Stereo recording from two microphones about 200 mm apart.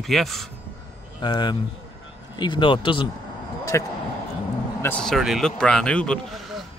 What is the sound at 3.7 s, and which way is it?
Speech, 15° left (ahead or behind).